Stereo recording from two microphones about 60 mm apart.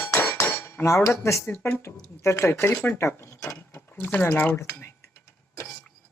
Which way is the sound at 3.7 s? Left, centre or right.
Left.